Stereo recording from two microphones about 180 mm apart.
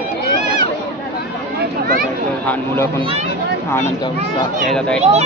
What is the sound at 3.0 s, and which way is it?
Speech, 30° right (ahead or behind).